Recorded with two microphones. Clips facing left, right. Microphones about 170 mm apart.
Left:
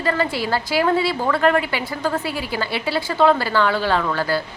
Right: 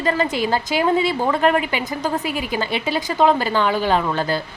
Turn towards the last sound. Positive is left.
turn(degrees=-15)  # may be behind; listen again after turning